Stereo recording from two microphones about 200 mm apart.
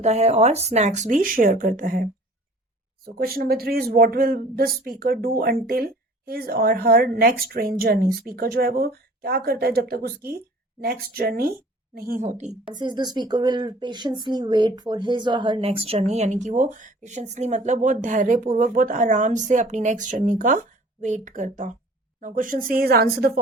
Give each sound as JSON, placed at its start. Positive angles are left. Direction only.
{"t": 0.0, "sound": "speech", "side_deg": -30}
{"t": 3.2, "sound": "speech", "side_deg": -50}
{"t": 12.7, "sound": "speech", "side_deg": -20}